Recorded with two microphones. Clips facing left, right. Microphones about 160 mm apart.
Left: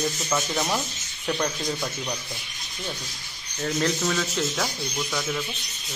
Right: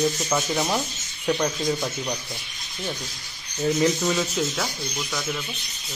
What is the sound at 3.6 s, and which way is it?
Speech, 10° right (ahead or behind).